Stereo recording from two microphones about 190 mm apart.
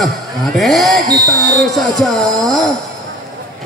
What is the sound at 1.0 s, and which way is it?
Speech, 20° right (ahead or behind).